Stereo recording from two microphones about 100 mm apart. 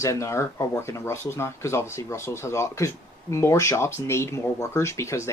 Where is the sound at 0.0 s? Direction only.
30° left (ahead or behind).